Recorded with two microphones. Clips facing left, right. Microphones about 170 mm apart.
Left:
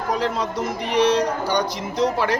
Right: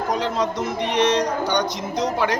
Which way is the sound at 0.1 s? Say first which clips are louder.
Left 1 dB; 5° left (ahead or behind).